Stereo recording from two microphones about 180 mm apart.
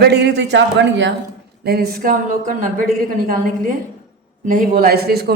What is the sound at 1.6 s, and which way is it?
A woman's voice, 60° right (ahead or behind).